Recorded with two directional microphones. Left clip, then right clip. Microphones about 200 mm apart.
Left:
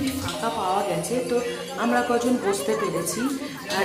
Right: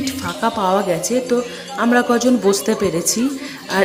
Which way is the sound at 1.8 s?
25° right (ahead or behind).